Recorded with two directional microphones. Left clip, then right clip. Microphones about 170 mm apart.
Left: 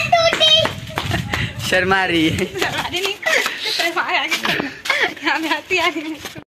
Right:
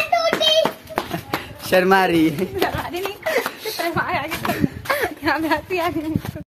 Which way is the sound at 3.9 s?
75° right (ahead or behind).